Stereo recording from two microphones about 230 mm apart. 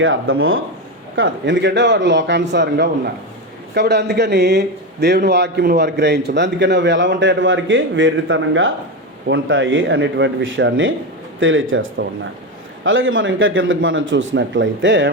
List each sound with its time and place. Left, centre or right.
0.0 s a man's voice: right